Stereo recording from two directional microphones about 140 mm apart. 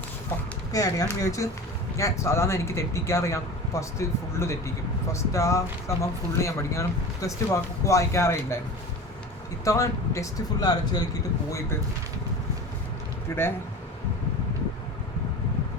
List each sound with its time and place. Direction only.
0.7 s speech: 25° left (ahead or behind)
9.6 s speech: 20° left (ahead or behind)